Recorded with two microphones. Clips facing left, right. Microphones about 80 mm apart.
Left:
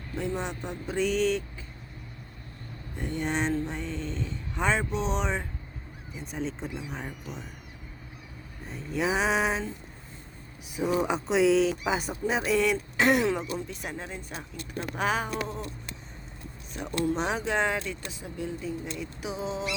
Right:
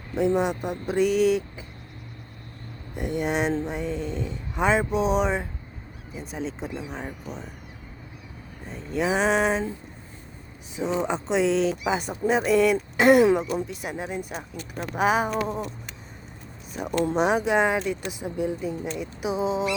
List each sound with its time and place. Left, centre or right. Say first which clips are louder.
0.5 s speech: right 6 dB; centre
2.9 s speech: right 4 dB; centre
8.6 s speech: right 3 dB; centre
10.8 s speech: right 1 dB; centre
13.2 s speech: right 7 dB; centre
16.7 s speech: right 5 dB; centre